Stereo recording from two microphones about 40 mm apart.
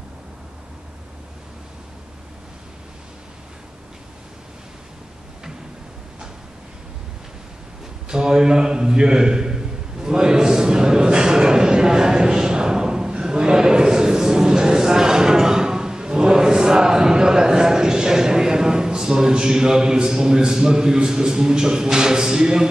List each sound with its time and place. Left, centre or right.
8.1 s a man's voice: centre